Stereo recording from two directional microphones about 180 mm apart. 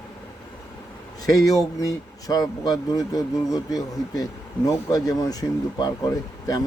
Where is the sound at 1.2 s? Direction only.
20° left (ahead or behind).